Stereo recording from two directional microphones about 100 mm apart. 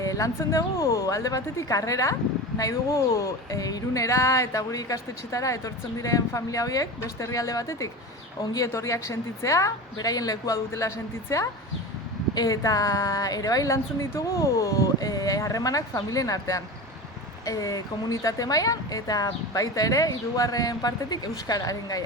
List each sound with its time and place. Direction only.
0.0 s speech: 35° left (ahead or behind)